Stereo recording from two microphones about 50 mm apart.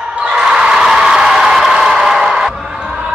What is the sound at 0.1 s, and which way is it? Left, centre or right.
Basketball bounce, right.